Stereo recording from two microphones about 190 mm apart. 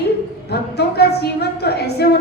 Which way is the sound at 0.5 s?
60° left (ahead or behind).